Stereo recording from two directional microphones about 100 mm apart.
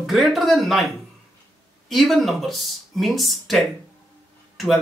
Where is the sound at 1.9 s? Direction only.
Centre (ahead or behind).